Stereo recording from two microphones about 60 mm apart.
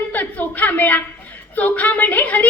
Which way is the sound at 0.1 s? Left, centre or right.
Left.